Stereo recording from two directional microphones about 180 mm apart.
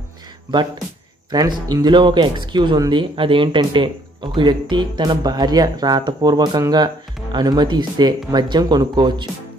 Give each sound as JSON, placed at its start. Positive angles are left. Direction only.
{"t": 1.3, "sound": "speech", "side_deg": -20}